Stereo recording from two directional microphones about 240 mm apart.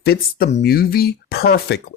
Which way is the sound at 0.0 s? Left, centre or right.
Left.